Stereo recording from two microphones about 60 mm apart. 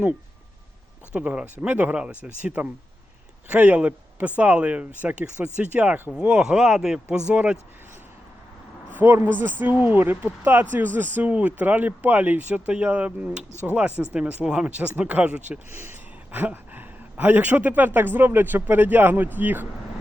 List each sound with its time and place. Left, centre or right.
1.1 s a man's voice: centre
7.3 s speech: right
8.9 s speech: right
15.7 s speech: right